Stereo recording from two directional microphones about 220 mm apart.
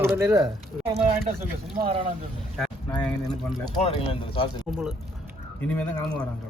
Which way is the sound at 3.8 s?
25° left (ahead or behind).